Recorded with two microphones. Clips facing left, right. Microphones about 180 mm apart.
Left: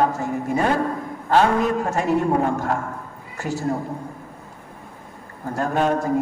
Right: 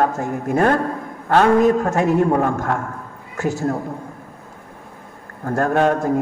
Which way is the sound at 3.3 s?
50° right (ahead or behind).